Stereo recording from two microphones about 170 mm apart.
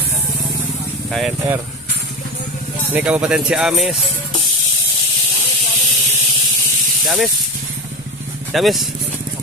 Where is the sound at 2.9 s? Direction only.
5° right (ahead or behind).